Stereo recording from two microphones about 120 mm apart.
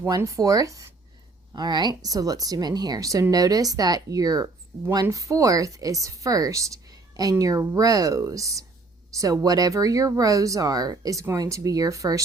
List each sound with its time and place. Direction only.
0.2 s speech: 30° right (ahead or behind)